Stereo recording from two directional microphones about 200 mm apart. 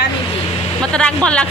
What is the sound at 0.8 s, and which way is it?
Speech, 5° left (ahead or behind).